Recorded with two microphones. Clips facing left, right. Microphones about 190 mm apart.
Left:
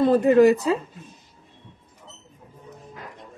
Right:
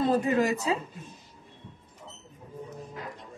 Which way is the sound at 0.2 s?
55° left (ahead or behind).